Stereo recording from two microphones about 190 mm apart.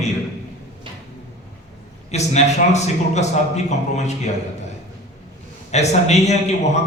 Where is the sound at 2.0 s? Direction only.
35° left (ahead or behind).